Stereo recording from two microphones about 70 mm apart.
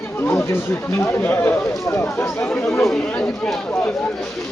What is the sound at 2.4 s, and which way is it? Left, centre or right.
Speech, centre.